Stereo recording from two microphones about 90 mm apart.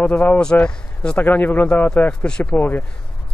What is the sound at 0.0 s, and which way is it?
A man's voice, 15° left (ahead or behind).